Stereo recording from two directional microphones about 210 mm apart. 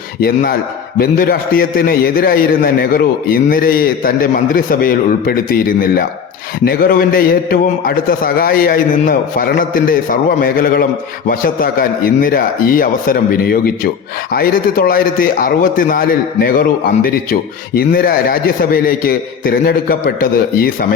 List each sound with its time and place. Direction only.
0.2 s a man's voice: 45° left (ahead or behind)